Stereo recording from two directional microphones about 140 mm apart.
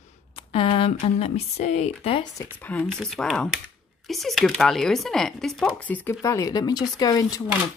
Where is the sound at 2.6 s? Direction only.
10° left (ahead or behind); by 7.4 s 25° left (ahead or behind).